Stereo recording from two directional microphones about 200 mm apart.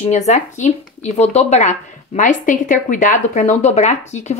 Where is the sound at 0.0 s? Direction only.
35° left (ahead or behind).